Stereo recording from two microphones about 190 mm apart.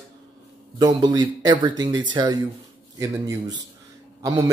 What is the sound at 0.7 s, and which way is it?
A man's voice, 20° right (ahead or behind).